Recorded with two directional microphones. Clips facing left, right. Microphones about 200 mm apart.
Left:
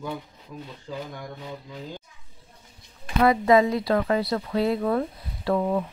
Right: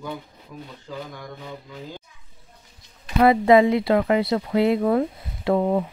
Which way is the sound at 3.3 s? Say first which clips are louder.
Right 4 dB; 25° right (ahead or behind).